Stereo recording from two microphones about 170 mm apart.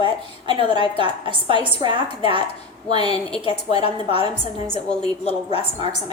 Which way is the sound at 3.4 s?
35° left (ahead or behind).